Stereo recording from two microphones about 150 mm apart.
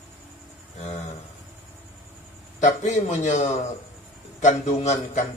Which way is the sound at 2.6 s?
50° left (ahead or behind).